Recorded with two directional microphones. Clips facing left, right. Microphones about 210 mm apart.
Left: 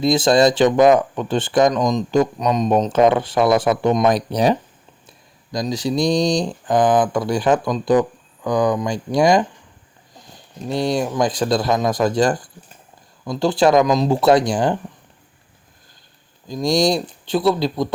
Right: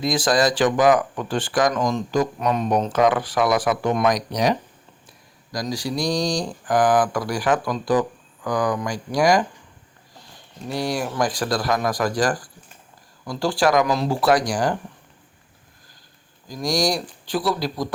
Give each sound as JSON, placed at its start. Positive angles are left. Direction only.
{"t": 0.0, "sound": "speech", "side_deg": 25}
{"t": 10.7, "sound": "speech", "side_deg": 20}
{"t": 16.5, "sound": "speech", "side_deg": 25}